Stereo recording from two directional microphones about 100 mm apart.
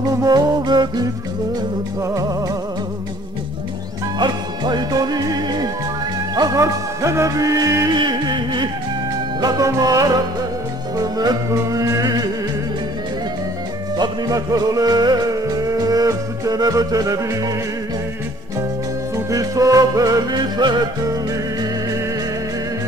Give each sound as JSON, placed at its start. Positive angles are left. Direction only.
{"t": 0.2, "sound": "music", "side_deg": -40}
{"t": 4.2, "sound": "music", "side_deg": -45}
{"t": 7.9, "sound": "music", "side_deg": -45}
{"t": 9.4, "sound": "music", "side_deg": -35}
{"t": 13.9, "sound": "music", "side_deg": -40}
{"t": 19.1, "sound": "music", "side_deg": -35}